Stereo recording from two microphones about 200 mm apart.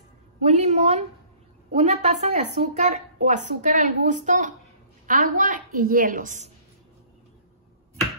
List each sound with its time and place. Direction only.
0.4 s a woman's voice: 35° right (ahead or behind)